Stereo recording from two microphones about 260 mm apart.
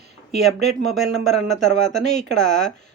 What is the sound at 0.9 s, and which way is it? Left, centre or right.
Speech, centre.